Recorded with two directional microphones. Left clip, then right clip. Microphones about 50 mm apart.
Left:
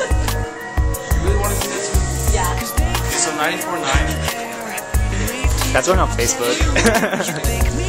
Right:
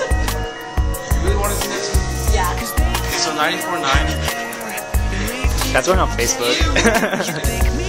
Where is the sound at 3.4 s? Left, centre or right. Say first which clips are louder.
Right 1 dB; right.